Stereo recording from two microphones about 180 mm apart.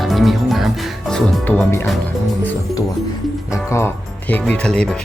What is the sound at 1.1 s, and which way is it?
Speech, 10° left (ahead or behind).